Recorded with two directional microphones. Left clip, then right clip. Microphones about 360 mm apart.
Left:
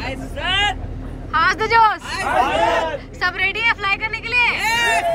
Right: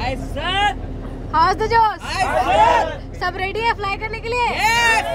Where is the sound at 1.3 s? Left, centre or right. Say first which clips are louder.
Even; centre.